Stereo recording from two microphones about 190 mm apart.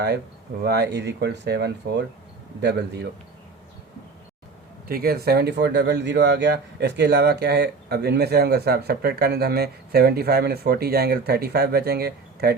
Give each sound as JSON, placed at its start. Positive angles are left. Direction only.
{"t": 0.6, "sound": "speech", "side_deg": -60}
{"t": 4.9, "sound": "speech", "side_deg": -50}